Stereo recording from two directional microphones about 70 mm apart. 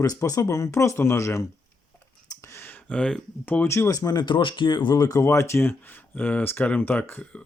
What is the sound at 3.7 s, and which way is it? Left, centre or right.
Speech, left.